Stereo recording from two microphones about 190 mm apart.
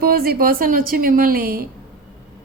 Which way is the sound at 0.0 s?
50° right (ahead or behind).